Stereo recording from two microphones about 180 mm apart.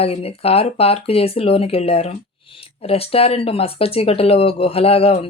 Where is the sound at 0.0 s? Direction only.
35° left (ahead or behind).